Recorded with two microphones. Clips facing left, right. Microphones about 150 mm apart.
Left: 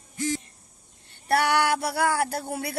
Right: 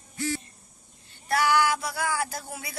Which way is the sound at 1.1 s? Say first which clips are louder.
Left 1 dB; 65° left (ahead or behind).